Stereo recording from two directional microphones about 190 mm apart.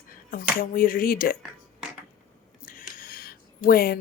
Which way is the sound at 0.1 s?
50° left (ahead or behind).